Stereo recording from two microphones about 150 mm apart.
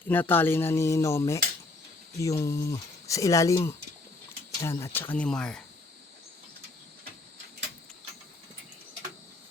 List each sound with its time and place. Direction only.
0.0 s speech: 10° left (ahead or behind)